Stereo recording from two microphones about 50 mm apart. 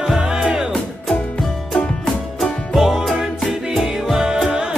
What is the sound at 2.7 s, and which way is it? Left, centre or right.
Music, centre.